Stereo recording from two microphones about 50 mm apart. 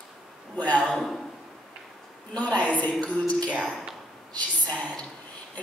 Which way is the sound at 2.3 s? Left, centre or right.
Left.